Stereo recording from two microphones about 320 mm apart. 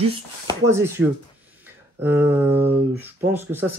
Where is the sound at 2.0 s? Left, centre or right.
Centre.